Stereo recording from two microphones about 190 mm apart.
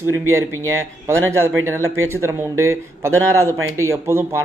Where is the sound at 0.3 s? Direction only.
15° right (ahead or behind).